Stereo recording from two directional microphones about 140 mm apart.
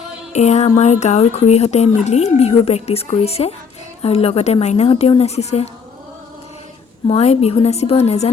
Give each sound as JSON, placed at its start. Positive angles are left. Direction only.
{"t": 0.3, "sound": "speech", "side_deg": 55}
{"t": 7.1, "sound": "speech", "side_deg": 50}